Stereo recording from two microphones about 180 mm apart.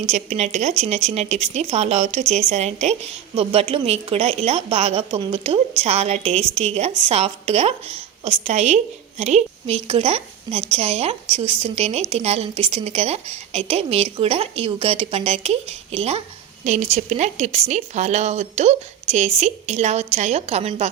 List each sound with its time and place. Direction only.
0.0 s a woman's voice: 40° right (ahead or behind)